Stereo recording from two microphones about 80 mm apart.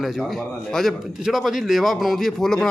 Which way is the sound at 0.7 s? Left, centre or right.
Centre.